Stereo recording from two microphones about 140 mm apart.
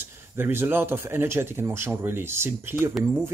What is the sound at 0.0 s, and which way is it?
Speech, 15° right (ahead or behind).